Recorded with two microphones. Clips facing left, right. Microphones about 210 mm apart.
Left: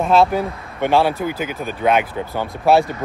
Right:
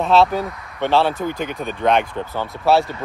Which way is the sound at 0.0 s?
10° left (ahead or behind).